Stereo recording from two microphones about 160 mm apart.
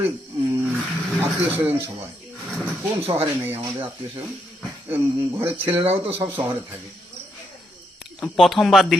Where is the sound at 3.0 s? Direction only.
35° right (ahead or behind).